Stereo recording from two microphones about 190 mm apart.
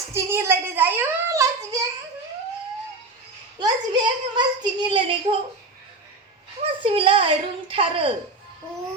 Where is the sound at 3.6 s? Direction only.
25° right (ahead or behind).